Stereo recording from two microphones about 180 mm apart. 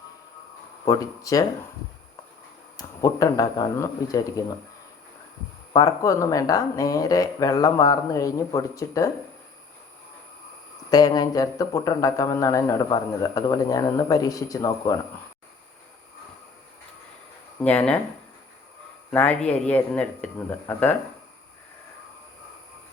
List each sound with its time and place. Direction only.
0.9 s speech: 20° left (ahead or behind)
2.7 s speech: 20° left (ahead or behind)
5.7 s speech: 20° left (ahead or behind)
10.9 s speech: 20° left (ahead or behind)
17.6 s speech: 5° left (ahead or behind)
19.1 s speech: 5° left (ahead or behind)